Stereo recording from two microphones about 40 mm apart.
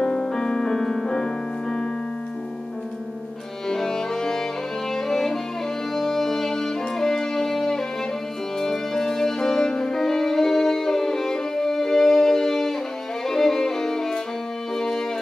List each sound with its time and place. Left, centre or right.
0.0 s music: centre
3.6 s music: centre
13.3 s violin: centre
14.8 s music: centre